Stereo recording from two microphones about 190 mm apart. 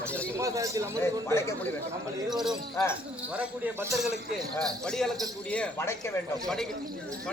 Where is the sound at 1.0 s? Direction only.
15° left (ahead or behind).